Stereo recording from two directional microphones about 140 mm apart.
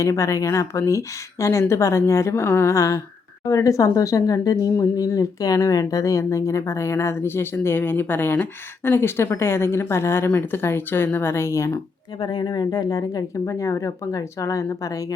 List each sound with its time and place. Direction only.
0.0 s speech: 20° left (ahead or behind)